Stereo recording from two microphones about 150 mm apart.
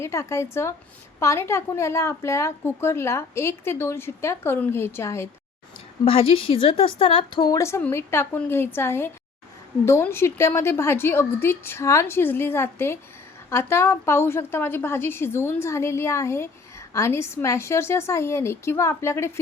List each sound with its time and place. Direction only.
0.0 s a woman's voice: 20° left (ahead or behind)
6.1 s a woman's voice: 40° left (ahead or behind); by 19.3 s 20° left (ahead or behind)